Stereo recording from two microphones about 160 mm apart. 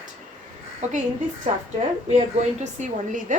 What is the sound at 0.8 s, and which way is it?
A woman's voice, 50° right (ahead or behind).